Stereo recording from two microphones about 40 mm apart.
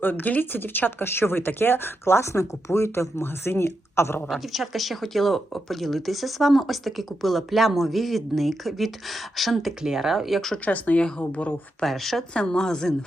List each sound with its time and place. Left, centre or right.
0.0 s speech: left
0.6 s speech: left
4.3 s speech: centre
10.7 s speech: left
11.8 s speech: centre
12.3 s speech: centre